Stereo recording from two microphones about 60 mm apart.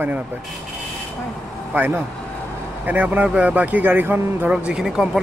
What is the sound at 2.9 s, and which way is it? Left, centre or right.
Speech, right.